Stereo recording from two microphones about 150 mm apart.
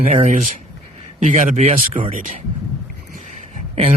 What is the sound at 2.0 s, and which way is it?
Speech, 60° right (ahead or behind).